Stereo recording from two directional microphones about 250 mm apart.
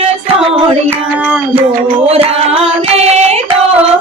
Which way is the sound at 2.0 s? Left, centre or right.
Right.